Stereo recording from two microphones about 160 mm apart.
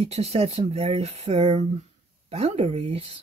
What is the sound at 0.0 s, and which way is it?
Speech, 40° right (ahead or behind).